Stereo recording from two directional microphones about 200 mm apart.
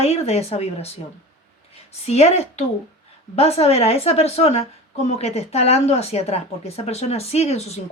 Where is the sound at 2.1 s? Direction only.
35° left (ahead or behind).